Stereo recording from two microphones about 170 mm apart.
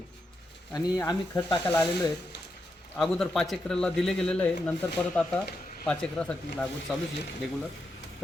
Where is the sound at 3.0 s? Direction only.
Centre (ahead or behind).